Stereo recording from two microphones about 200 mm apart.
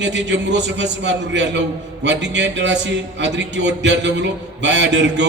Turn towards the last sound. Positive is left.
turn(degrees=-60)  # may be behind; listen again after turning